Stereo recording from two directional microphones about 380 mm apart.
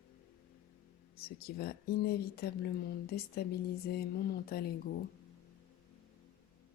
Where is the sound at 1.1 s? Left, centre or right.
Left.